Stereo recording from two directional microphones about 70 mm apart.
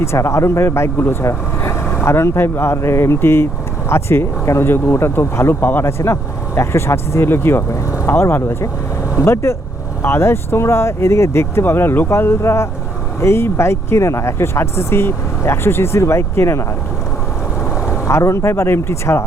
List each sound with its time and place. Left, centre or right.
0.0 s speech: left
18.1 s speech: left